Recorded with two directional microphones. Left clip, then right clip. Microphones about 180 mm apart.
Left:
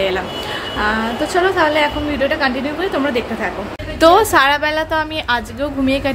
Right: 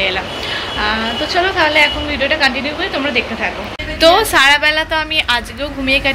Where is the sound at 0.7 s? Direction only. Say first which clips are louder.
Even; 40° left (ahead or behind).